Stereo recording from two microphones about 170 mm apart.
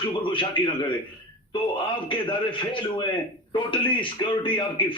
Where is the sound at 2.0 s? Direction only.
30° left (ahead or behind).